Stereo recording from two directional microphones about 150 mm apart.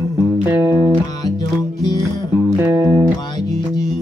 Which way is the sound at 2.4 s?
15° right (ahead or behind).